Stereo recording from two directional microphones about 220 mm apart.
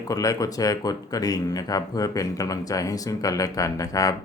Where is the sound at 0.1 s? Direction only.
15° left (ahead or behind).